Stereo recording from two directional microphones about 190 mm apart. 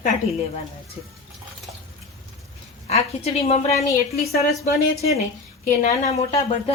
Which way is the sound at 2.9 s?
35° left (ahead or behind).